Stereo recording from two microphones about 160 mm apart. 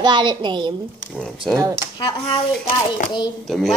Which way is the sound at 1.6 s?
20° right (ahead or behind).